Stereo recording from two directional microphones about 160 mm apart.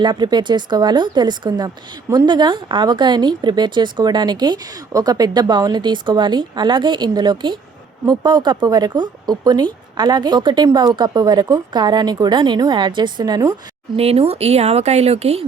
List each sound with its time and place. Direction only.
0.0 s speech: 30° right (ahead or behind)
13.9 s speech: 40° right (ahead or behind)